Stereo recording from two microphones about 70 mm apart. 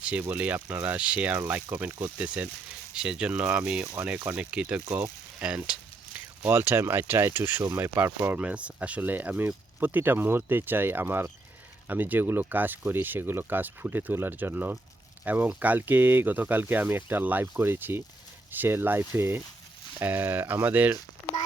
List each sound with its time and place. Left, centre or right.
0.0 s speech: centre
8.4 s speech: centre